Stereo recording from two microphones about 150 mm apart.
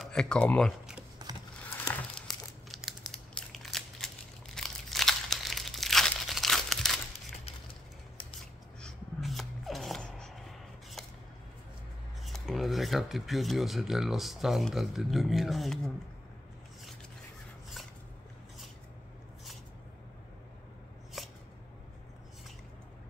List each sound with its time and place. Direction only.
0.0 s speech: 5° left (ahead or behind)
1.2 s crumpling: 25° right (ahead or behind)
2.1 s crumpling: centre (ahead or behind)
8.8 s a sound: centre (ahead or behind)
12.3 s speech: centre (ahead or behind)
21.2 s a sound: centre (ahead or behind)